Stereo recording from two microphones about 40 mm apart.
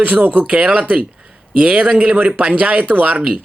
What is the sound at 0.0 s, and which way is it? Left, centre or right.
Speech, right.